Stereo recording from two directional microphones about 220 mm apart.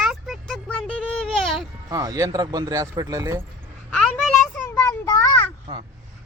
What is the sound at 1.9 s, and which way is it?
Speech, 15° right (ahead or behind).